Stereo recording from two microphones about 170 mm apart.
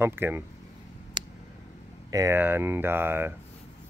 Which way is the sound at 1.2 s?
25° right (ahead or behind).